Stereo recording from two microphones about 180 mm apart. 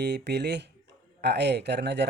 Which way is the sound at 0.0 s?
70° right (ahead or behind).